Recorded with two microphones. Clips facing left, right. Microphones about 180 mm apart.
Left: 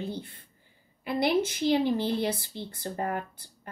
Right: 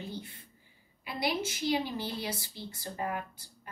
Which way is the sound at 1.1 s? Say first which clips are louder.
Left 7 dB; 55° left (ahead or behind).